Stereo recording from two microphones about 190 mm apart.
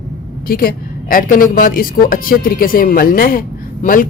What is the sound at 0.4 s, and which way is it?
Speech, 50° left (ahead or behind).